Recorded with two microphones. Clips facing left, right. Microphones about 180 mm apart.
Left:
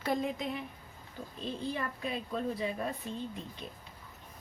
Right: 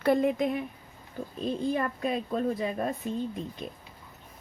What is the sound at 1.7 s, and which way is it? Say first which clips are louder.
A woman's voice: right 7 dB; 50° right (ahead or behind).